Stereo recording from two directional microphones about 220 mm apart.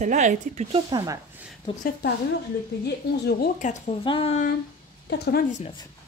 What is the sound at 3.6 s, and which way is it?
Speech, 30° left (ahead or behind).